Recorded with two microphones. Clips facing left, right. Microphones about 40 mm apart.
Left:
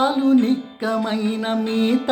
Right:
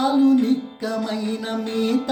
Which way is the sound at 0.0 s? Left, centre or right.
Left.